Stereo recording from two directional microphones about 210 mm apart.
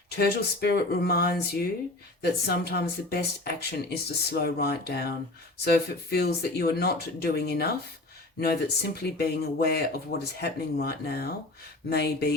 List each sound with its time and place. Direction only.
0.2 s speech: 50° left (ahead or behind)